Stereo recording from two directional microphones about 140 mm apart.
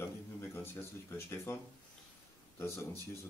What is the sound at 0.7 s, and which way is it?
Speech, 15° left (ahead or behind).